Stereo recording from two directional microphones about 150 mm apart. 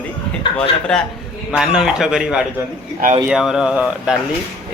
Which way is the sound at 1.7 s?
5° right (ahead or behind).